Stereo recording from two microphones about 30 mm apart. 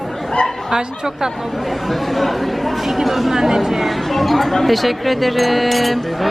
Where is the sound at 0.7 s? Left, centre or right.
Centre.